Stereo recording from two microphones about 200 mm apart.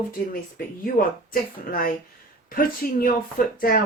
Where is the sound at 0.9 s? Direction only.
45° left (ahead or behind).